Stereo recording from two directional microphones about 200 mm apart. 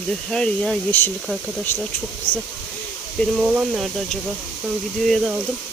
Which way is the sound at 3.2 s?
5° right (ahead or behind).